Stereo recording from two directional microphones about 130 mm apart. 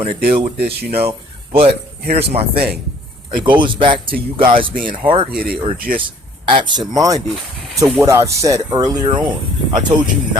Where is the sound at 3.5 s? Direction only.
40° right (ahead or behind).